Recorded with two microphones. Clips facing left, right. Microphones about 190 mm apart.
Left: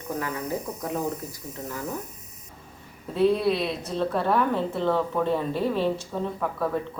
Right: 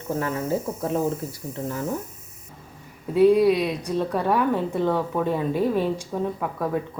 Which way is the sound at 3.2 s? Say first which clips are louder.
Right 5 dB; 10° right (ahead or behind).